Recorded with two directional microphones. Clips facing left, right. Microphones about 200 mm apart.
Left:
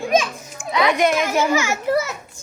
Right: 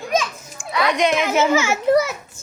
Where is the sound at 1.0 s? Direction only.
5° left (ahead or behind).